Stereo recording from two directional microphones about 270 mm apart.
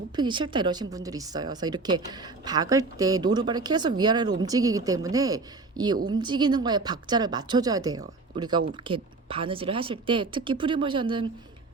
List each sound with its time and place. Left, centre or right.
0.2 s a woman's voice: centre